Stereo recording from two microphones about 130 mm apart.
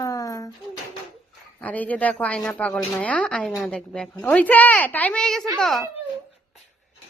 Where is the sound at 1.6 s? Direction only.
10° left (ahead or behind).